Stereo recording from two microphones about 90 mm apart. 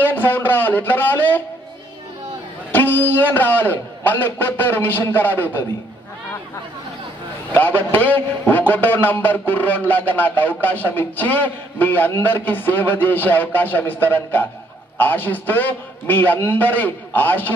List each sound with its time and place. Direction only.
0.0 s a man's voice: 20° left (ahead or behind)
2.7 s a man's voice: 20° left (ahead or behind)
7.5 s a man's voice: 20° left (ahead or behind)